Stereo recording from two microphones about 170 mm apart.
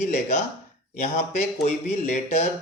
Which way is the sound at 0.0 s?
45° left (ahead or behind).